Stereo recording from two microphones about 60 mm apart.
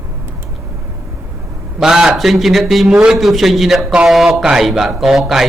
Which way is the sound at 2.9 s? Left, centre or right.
Centre.